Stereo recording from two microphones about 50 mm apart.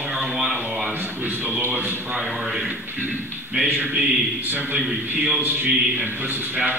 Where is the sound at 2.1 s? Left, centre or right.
Centre.